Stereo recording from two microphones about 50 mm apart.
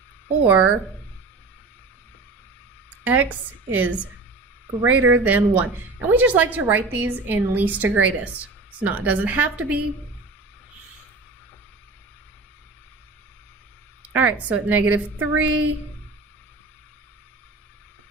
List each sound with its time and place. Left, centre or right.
0.4 s a woman's voice: right
3.0 s a woman's voice: right
5.0 s a woman's voice: right
14.1 s a woman's voice: right